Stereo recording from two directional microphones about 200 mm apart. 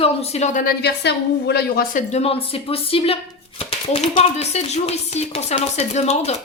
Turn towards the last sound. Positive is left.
turn(degrees=35)  # may be behind; listen again after turning